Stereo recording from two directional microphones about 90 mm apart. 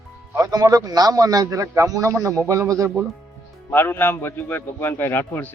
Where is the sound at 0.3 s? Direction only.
40° right (ahead or behind).